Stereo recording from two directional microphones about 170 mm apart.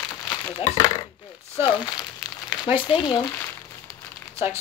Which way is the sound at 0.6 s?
20° left (ahead or behind).